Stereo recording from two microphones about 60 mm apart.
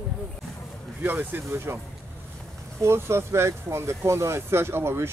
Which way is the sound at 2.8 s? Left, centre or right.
Right.